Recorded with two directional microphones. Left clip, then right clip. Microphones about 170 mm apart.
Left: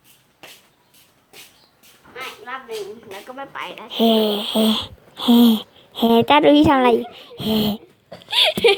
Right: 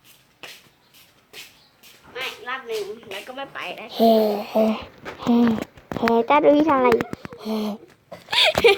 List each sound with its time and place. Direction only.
2.1 s a woman's voice: 40° left (ahead or behind); by 4.3 s 5° left (ahead or behind)
4.3 s speech: 35° left (ahead or behind)
4.6 s speech: 55° left (ahead or behind)
7.3 s speech: 55° left (ahead or behind)
8.3 s a sound: centre (ahead or behind)